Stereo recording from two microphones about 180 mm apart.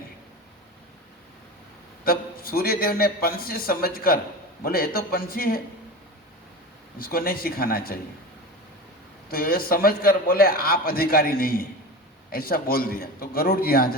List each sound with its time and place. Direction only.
2.0 s a man's voice: 55° left (ahead or behind)
7.0 s a man's voice: 55° left (ahead or behind)
9.3 s a man's voice: 55° left (ahead or behind)